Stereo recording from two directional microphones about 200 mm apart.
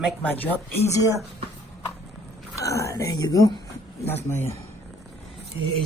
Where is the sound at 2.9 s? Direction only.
20° left (ahead or behind).